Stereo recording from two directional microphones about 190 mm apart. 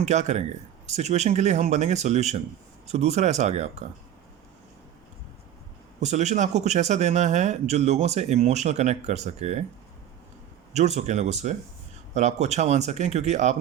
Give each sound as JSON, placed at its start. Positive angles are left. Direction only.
{"t": 0.0, "sound": "speech", "side_deg": -35}
{"t": 6.0, "sound": "speech", "side_deg": -40}
{"t": 10.8, "sound": "speech", "side_deg": -35}